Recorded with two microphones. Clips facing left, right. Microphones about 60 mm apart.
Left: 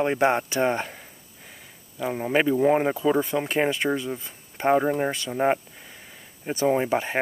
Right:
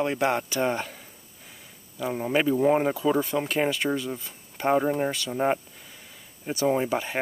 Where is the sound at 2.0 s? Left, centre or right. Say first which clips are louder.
Left 2 dB; centre.